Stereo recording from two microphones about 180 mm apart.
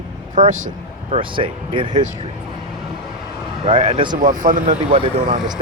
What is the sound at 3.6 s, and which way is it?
Speech, 30° right (ahead or behind).